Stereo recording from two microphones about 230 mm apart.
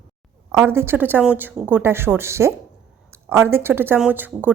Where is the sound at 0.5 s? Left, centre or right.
Centre.